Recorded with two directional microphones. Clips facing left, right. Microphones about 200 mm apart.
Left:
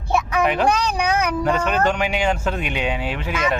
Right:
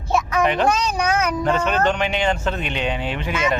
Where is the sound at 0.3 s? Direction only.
5° left (ahead or behind).